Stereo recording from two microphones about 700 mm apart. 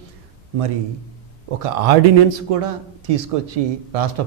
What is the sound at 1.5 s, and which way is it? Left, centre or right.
A man's voice, right.